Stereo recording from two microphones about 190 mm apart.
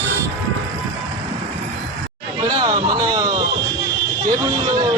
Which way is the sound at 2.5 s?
20° right (ahead or behind).